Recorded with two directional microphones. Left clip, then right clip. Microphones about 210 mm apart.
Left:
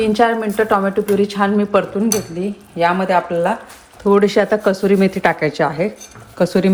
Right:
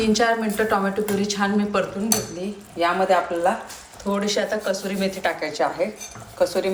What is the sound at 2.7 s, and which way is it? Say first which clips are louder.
Speech: left 4 dB; 45° left (ahead or behind).